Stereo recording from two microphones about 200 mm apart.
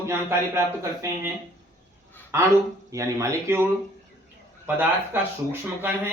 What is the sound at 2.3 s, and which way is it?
A man's voice, 15° right (ahead or behind).